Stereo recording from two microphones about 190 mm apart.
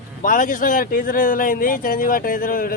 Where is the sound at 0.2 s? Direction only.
45° left (ahead or behind).